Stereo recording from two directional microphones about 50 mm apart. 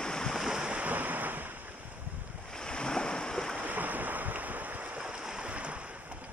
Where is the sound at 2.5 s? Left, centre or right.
Centre.